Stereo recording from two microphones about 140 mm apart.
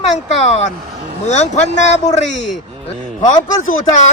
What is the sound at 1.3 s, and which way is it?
A man's voice, 55° left (ahead or behind).